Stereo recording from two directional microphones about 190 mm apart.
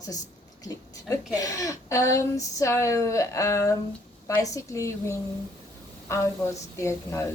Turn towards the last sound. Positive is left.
turn(degrees=15)  # may be behind; listen again after turning